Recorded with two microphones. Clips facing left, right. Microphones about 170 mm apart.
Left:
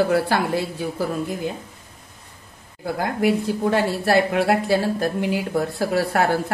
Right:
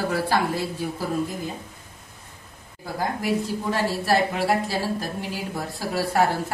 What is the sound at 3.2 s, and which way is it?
Speech, 60° left (ahead or behind).